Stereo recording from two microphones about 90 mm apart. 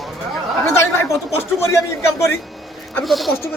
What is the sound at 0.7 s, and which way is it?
Speech, 30° left (ahead or behind).